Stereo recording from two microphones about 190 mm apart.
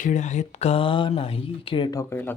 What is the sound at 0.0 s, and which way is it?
Speech, 40° left (ahead or behind).